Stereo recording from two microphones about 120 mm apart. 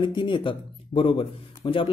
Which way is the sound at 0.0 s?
40° left (ahead or behind).